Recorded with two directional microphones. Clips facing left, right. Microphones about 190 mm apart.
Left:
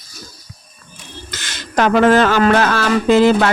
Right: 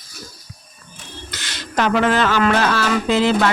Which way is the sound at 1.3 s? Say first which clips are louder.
Left 1 dB; 50° left (ahead or behind).